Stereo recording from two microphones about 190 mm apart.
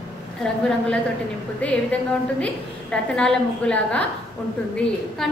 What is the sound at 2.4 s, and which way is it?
A woman's voice, 5° left (ahead or behind).